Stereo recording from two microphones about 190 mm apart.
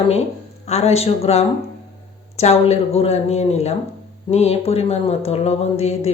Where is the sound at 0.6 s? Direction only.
35° left (ahead or behind).